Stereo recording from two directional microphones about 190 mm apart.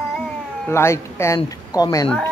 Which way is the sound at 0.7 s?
15° left (ahead or behind).